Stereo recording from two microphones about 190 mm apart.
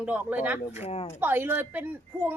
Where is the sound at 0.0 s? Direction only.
10° right (ahead or behind).